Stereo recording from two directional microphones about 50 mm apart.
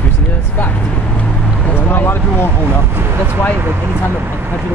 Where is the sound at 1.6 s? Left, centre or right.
Left.